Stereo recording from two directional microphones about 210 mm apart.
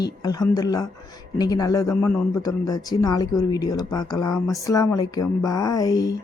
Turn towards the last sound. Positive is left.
turn(degrees=15)  # may be behind; listen again after turning